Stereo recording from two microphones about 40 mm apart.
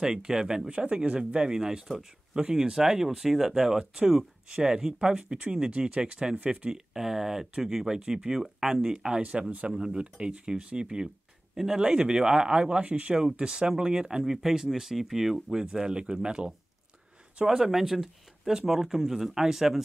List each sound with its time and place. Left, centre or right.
0.0 s speech: centre
2.4 s speech: centre
6.7 s speech: centre
11.5 s speech: centre
17.5 s speech: centre